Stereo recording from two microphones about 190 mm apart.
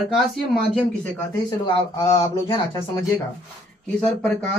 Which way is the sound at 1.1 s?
20° left (ahead or behind).